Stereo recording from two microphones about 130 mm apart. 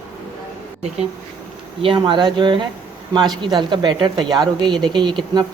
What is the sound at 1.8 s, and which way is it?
Speech, 40° right (ahead or behind).